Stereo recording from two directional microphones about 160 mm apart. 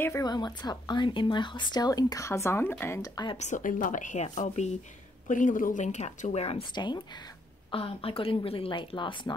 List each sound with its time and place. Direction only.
0.0 s speech: 20° left (ahead or behind)
3.3 s a woman's voice: 50° left (ahead or behind); by 9.3 s 30° left (ahead or behind)